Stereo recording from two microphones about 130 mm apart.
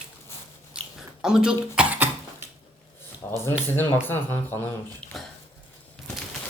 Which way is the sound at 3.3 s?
20° left (ahead or behind).